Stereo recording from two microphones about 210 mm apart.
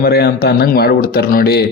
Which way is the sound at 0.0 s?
50° left (ahead or behind).